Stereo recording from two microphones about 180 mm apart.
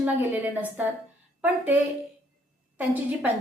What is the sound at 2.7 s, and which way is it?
Speech, 10° right (ahead or behind).